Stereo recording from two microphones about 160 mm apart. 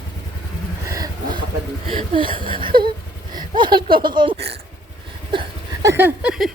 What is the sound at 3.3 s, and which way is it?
Speech, 30° right (ahead or behind).